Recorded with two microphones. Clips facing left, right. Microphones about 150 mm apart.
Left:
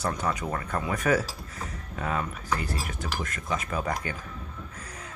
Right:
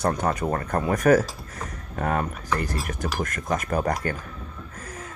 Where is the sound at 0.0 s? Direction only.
50° right (ahead or behind).